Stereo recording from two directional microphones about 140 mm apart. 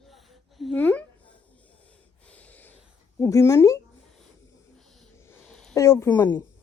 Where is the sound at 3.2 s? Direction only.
20° left (ahead or behind).